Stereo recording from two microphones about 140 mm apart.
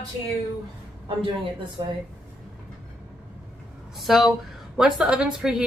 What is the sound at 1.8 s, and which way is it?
Speech, 40° right (ahead or behind).